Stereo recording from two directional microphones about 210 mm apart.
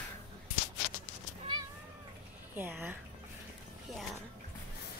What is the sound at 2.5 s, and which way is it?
Speech, 10° right (ahead or behind).